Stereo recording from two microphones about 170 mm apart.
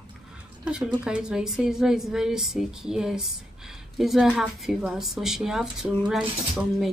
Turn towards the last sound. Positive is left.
turn(degrees=0)  # may be behind; listen again after turning